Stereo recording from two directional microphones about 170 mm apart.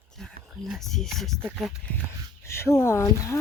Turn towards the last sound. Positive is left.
turn(degrees=15)  # may be behind; listen again after turning